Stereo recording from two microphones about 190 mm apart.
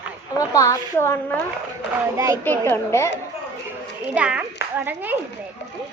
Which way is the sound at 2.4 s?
10° left (ahead or behind).